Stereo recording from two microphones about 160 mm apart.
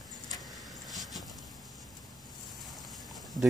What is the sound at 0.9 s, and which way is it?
Vehicle, centre (ahead or behind).